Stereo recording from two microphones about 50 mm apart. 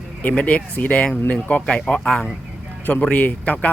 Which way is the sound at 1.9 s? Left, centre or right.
Centre.